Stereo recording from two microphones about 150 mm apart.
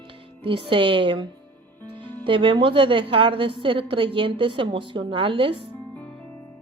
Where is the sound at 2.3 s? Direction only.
35° right (ahead or behind).